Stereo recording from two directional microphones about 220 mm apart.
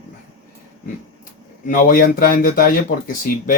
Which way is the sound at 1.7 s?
40° left (ahead or behind).